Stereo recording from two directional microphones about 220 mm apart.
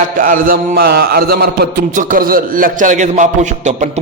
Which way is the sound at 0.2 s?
40° right (ahead or behind).